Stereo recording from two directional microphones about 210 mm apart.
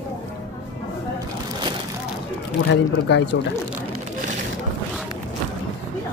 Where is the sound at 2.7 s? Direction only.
55° left (ahead or behind).